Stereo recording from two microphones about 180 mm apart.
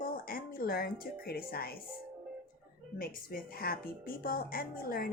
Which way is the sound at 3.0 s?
55° left (ahead or behind).